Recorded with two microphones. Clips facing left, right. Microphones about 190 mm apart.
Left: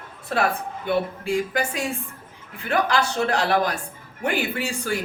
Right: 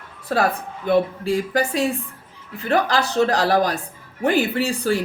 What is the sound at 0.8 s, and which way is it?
Speech, 35° right (ahead or behind).